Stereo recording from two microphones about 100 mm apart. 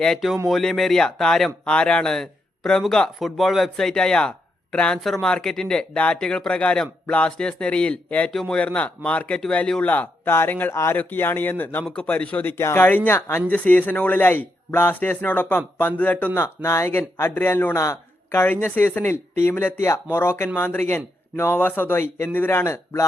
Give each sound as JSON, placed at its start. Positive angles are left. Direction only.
{"t": 0.0, "sound": "speech", "side_deg": 5}